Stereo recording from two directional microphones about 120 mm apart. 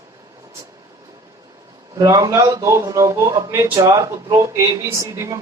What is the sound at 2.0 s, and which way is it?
Speech, 25° right (ahead or behind).